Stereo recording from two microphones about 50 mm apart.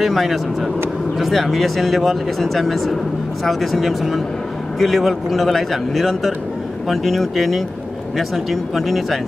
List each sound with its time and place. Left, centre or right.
0.0 s speech: centre